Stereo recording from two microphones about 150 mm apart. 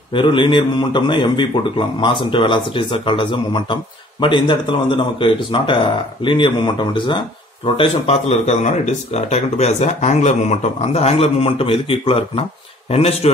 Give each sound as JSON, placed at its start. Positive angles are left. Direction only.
{"t": 0.1, "sound": "a man's voice", "side_deg": 35}